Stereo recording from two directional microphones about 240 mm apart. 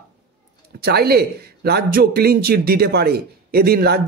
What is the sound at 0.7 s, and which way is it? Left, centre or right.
Speech, right.